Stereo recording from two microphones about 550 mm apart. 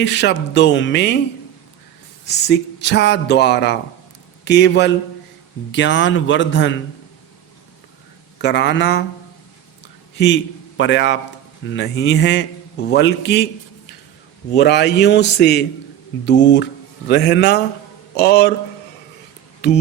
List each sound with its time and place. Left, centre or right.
0.0 s a man's voice: centre
2.2 s a man's voice: centre
8.4 s a man's voice: centre
10.2 s a man's voice: centre
14.5 s a man's voice: centre
19.6 s speech: centre